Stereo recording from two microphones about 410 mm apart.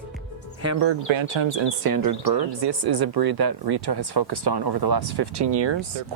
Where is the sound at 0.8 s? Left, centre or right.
Right.